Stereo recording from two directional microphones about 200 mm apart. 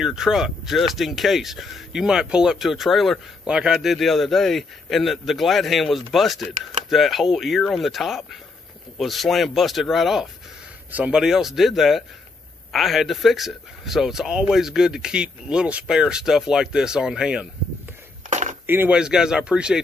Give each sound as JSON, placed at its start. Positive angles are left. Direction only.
{"t": 0.0, "sound": "speech", "side_deg": -5}
{"t": 18.3, "sound": "a sound", "side_deg": -35}
{"t": 18.7, "sound": "speech", "side_deg": -10}